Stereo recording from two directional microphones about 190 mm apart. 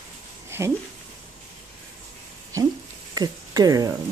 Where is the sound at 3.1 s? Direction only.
20° right (ahead or behind).